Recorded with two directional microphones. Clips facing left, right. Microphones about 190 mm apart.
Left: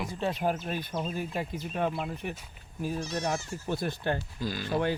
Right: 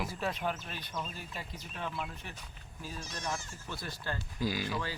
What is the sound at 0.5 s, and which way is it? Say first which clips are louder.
Speech: left 8 dB; 50° left (ahead or behind).